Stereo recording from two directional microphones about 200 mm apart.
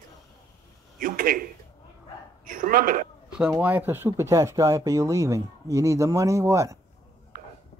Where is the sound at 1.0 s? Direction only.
45° right (ahead or behind).